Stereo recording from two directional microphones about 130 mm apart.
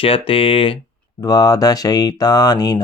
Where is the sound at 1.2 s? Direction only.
30° left (ahead or behind).